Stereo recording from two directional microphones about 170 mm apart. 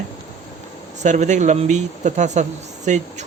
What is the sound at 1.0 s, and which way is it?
Speech, 45° right (ahead or behind).